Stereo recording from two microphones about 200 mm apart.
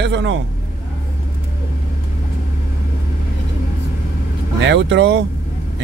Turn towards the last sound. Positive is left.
turn(degrees=-60)  # may be behind; listen again after turning